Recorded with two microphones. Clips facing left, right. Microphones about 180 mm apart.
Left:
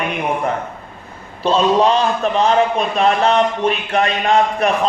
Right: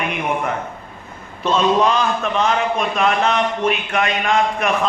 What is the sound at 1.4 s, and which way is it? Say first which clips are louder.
A man's voice: left 2 dB; 30° left (ahead or behind).